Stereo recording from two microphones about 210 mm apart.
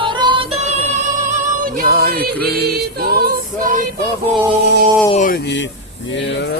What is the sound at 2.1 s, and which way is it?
A capella, 50° right (ahead or behind).